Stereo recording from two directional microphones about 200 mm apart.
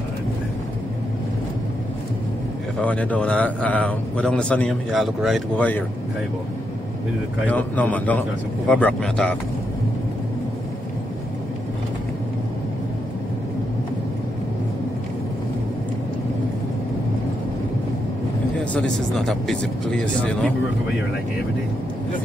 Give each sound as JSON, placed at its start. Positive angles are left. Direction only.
{"t": 2.8, "sound": "a man's voice", "side_deg": 5}
{"t": 7.4, "sound": "a man's voice", "side_deg": 10}
{"t": 18.6, "sound": "speech", "side_deg": 5}